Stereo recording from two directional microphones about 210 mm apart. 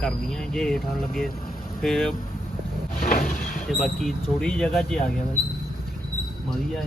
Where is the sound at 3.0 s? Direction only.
40° left (ahead or behind).